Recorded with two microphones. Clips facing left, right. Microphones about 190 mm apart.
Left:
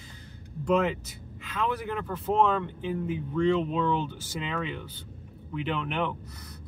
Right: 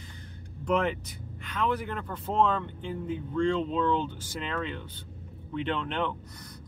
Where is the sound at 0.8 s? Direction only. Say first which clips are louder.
Left 2 dB; 5° left (ahead or behind).